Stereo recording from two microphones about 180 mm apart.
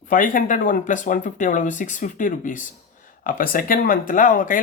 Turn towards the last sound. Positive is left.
turn(degrees=50)  # may be behind; listen again after turning